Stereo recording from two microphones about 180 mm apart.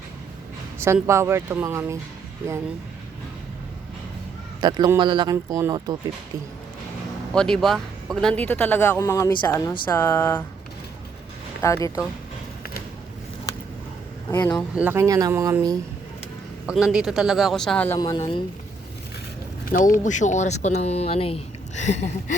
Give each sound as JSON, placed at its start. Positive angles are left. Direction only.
{"t": 1.0, "sound": "speech", "side_deg": -15}
{"t": 4.6, "sound": "speech", "side_deg": -25}
{"t": 7.3, "sound": "speech", "side_deg": 5}
{"t": 11.6, "sound": "speech", "side_deg": 15}
{"t": 14.3, "sound": "speech", "side_deg": 15}
{"t": 14.5, "sound": "speech", "side_deg": -10}
{"t": 16.6, "sound": "speech", "side_deg": -5}
{"t": 17.9, "sound": "a woman's voice", "side_deg": 20}
{"t": 19.6, "sound": "speech", "side_deg": 50}